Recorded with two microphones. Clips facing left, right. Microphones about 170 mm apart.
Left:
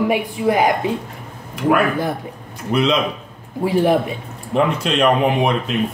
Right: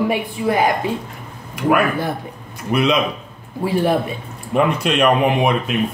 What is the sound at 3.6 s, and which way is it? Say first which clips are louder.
Speech: left 2 dB; 15° left (ahead or behind).